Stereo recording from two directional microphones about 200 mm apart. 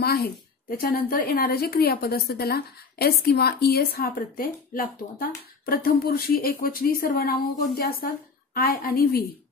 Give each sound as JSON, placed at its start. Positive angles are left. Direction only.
{"t": 0.0, "sound": "a woman's voice", "side_deg": 50}